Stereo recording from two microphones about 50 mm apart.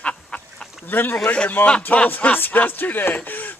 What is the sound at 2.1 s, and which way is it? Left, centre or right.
Speech, left.